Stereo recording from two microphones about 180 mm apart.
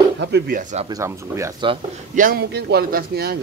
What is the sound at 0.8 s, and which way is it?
Speech, 15° right (ahead or behind).